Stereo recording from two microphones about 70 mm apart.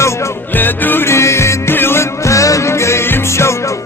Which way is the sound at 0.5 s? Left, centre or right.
Left.